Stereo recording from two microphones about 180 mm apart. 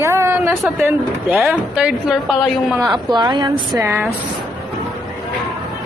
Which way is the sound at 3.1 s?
25° right (ahead or behind).